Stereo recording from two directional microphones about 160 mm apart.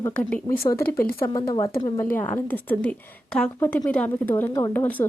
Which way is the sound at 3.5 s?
20° left (ahead or behind).